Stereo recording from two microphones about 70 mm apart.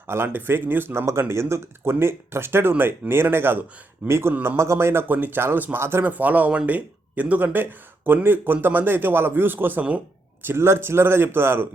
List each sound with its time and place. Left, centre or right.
0.1 s speech: right
1.3 s speech: right